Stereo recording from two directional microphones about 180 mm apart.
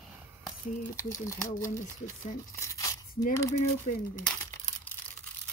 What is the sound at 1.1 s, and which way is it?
Speech, 15° left (ahead or behind).